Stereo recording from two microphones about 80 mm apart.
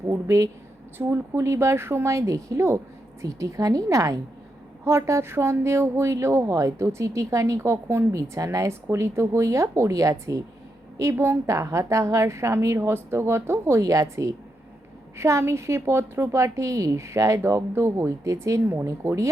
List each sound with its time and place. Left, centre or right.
0.1 s a woman's voice: right
0.9 s a woman's voice: right